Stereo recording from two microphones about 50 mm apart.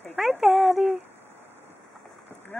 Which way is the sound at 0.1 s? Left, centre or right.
Centre.